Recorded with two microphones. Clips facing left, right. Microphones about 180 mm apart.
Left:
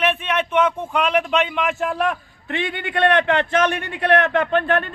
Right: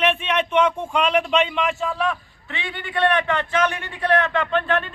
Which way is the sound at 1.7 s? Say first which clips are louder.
Left 2 dB; 60° left (ahead or behind).